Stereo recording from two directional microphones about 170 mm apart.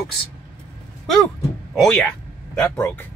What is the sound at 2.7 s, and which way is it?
Speech, 15° left (ahead or behind).